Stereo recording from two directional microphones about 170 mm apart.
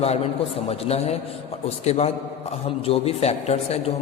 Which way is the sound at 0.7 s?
35° left (ahead or behind).